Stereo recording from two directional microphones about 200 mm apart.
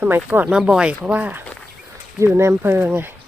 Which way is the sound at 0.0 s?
10° right (ahead or behind).